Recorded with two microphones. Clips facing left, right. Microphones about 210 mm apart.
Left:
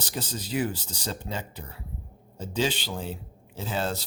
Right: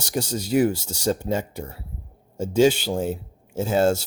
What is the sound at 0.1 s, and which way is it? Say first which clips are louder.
Speech: right 10 dB; 45° right (ahead or behind).